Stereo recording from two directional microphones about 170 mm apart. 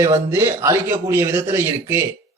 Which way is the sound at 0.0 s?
15° right (ahead or behind).